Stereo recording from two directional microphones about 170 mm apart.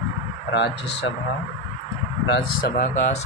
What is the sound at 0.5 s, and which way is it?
Speech, 85° left.